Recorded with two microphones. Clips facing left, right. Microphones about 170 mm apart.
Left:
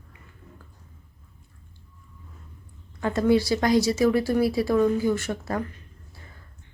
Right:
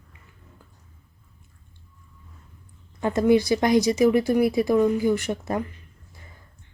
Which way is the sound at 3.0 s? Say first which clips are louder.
Right 2 dB; 20° right (ahead or behind).